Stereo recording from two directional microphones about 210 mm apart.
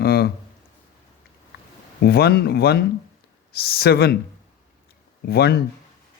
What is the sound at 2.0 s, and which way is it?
Speech, 50° left (ahead or behind).